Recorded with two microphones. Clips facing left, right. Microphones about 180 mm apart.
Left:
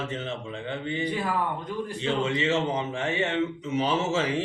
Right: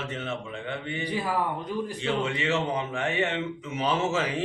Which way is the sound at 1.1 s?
15° right (ahead or behind).